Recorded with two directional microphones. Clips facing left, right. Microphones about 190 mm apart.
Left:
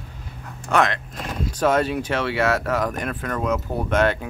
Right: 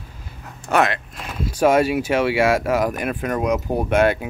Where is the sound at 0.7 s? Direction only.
5° right (ahead or behind).